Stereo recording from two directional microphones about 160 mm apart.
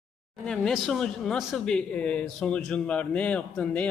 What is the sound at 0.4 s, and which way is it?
Speech, 5° left (ahead or behind).